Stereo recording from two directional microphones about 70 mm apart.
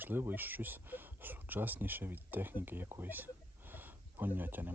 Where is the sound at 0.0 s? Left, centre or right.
Right.